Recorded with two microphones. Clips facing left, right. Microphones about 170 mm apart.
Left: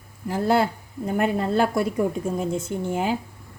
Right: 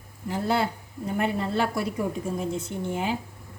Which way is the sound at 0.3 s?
50° left (ahead or behind).